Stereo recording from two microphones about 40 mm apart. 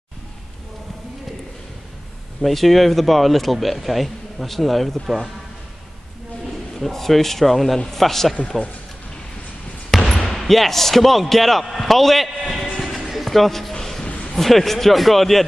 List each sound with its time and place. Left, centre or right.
2.4 s speech: centre
6.9 s a man's voice: centre
9.8 s speech: centre
12.7 s music: centre
13.7 s a sound: centre
14.0 s a sound: left
14.3 s speech: centre